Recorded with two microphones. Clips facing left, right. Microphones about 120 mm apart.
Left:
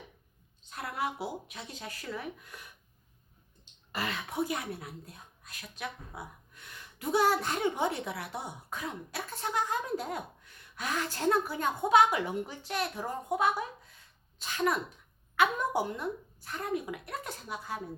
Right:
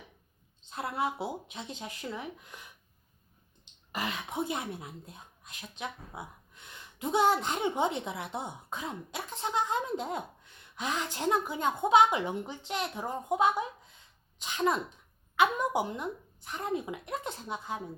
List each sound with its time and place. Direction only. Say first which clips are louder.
0.7 s a woman's voice: right 2 dB; 25° right (ahead or behind)
3.9 s a woman's voice: even; 15° right (ahead or behind)